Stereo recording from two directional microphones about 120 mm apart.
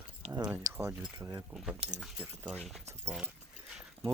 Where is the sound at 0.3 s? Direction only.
35° right (ahead or behind).